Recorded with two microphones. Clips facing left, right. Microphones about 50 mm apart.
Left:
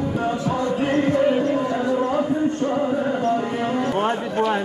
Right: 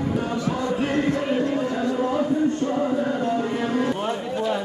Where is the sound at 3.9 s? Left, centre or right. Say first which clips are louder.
Left 4 dB; left.